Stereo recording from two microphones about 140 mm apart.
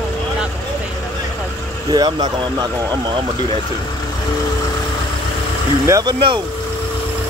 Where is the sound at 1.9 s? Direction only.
30° right (ahead or behind).